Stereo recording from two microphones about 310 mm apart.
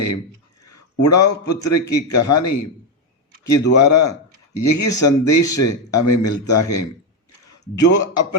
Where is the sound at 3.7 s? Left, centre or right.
Left.